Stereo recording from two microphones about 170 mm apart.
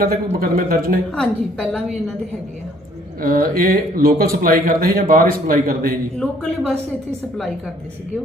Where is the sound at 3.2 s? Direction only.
60° right (ahead or behind).